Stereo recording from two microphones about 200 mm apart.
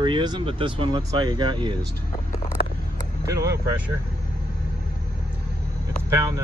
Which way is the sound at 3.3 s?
15° right (ahead or behind).